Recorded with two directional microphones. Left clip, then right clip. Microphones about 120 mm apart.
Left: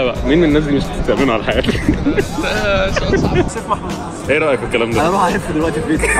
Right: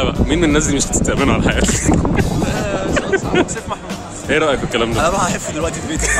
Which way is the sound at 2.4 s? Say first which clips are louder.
Left 4 dB; 30° right (ahead or behind).